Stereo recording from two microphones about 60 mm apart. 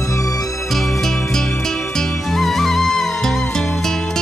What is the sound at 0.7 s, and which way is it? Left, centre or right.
Music, centre.